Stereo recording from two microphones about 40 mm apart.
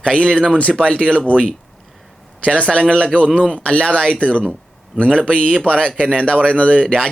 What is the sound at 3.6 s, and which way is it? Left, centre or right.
Speech, left.